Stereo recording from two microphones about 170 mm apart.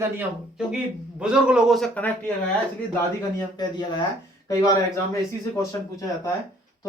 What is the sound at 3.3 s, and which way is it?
Speech, 25° left (ahead or behind).